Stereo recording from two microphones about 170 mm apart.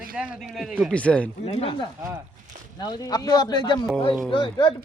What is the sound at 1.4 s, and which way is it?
Speech, 35° left (ahead or behind).